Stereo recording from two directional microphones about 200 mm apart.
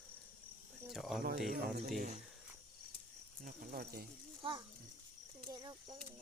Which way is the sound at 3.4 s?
45° right (ahead or behind).